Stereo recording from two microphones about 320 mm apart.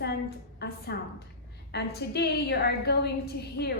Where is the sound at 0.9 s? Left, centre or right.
Left.